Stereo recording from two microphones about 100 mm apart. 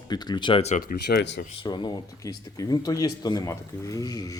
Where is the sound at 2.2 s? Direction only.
35° left (ahead or behind).